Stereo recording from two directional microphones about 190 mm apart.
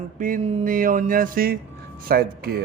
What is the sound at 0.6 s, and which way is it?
A man's voice, 45° right (ahead or behind).